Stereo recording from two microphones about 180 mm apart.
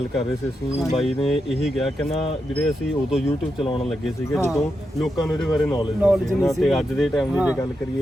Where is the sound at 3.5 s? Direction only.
30° left (ahead or behind).